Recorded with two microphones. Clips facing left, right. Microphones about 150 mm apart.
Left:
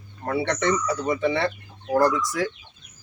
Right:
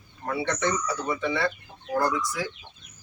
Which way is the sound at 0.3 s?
65° left (ahead or behind).